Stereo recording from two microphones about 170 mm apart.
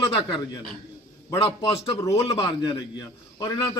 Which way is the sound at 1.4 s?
35° left (ahead or behind).